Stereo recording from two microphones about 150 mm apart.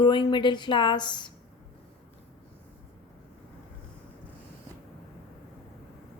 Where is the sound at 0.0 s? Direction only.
30° left (ahead or behind).